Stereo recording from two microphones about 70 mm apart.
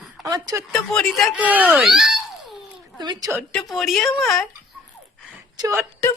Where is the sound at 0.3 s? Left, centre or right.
Right.